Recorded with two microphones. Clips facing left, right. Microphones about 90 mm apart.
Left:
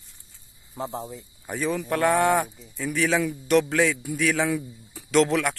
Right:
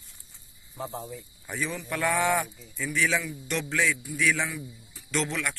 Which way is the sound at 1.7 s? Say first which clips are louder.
Left 6 dB; 60° left (ahead or behind).